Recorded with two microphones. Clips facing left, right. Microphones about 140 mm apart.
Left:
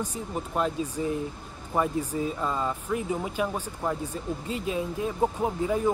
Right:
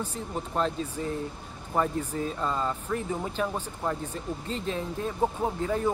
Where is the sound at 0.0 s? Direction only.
10° left (ahead or behind).